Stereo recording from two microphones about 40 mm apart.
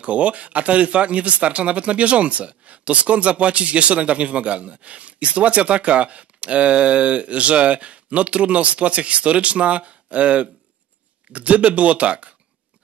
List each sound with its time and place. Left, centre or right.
0.0 s speech: right